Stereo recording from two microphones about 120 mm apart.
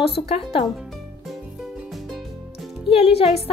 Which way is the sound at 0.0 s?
55° left (ahead or behind).